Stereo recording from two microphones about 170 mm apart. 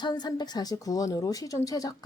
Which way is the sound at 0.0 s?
25° left (ahead or behind).